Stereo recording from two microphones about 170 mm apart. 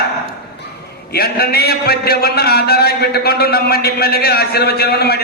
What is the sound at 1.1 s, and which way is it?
A man's voice, 65° left (ahead or behind).